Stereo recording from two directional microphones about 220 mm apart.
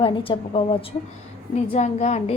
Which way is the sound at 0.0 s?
25° left (ahead or behind).